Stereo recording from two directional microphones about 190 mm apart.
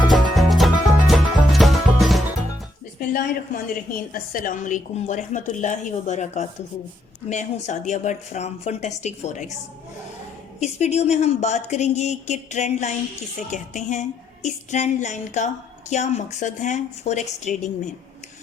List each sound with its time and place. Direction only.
0.1 s music: centre (ahead or behind)
3.0 s a woman's voice: 50° left (ahead or behind)
10.6 s a woman's voice: 35° left (ahead or behind)